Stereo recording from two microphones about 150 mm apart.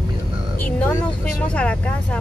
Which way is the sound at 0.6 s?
10° left (ahead or behind).